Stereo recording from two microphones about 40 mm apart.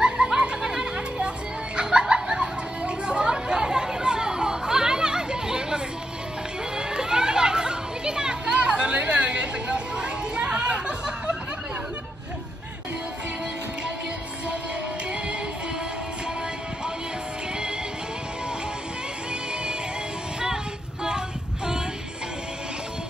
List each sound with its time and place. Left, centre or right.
0.0 s a sound: centre
1.8 s chatter: centre
6.8 s children playing: centre